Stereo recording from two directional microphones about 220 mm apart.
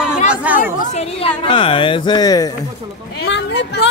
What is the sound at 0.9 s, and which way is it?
Speech, 25° left (ahead or behind).